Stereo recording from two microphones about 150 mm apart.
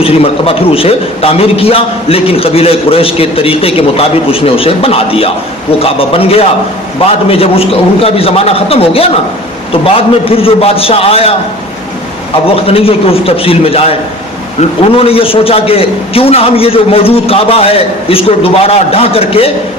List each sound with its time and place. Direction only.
0.0 s a man's voice: 40° left (ahead or behind)
12.5 s a man's voice: 40° left (ahead or behind)
14.9 s a man's voice: 40° left (ahead or behind)